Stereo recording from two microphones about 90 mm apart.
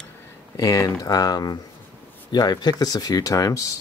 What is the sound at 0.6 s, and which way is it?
Speech, 35° left (ahead or behind).